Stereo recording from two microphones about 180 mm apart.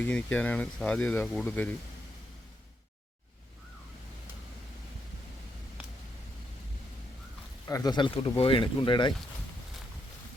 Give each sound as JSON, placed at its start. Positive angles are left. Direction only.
{"t": 0.0, "sound": "speech", "side_deg": 10}
{"t": 7.7, "sound": "speech", "side_deg": 20}